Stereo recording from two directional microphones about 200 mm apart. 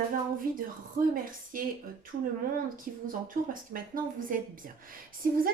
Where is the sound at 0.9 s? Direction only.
45° right (ahead or behind).